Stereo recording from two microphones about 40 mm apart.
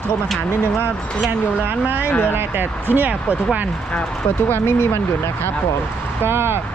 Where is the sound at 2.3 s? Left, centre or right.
Right.